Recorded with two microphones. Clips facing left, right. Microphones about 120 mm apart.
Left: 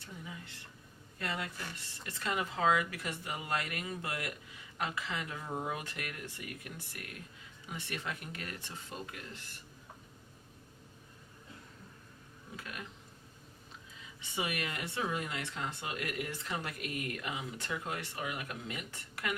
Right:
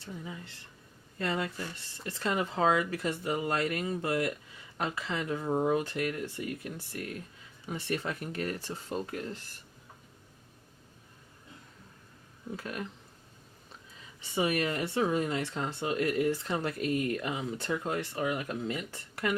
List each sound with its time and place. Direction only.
0.0 s speech: 30° right (ahead or behind)
12.5 s speech: 40° right (ahead or behind)
14.2 s speech: 35° right (ahead or behind)